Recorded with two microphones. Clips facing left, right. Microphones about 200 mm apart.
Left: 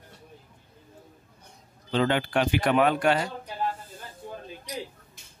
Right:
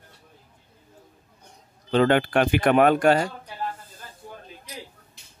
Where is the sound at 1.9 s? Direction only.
55° right (ahead or behind).